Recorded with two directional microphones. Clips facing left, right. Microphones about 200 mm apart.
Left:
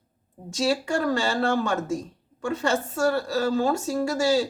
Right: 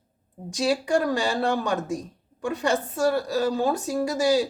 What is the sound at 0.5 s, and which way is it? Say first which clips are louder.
Speech: right 1 dB; 15° right (ahead or behind).